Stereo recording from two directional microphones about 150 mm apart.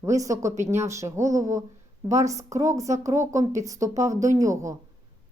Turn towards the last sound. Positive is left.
turn(degrees=-20)  # may be behind; listen again after turning